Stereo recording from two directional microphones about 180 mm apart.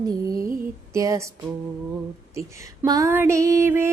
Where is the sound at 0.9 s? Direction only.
15° right (ahead or behind).